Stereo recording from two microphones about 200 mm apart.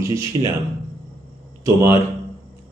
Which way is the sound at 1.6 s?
15° right (ahead or behind).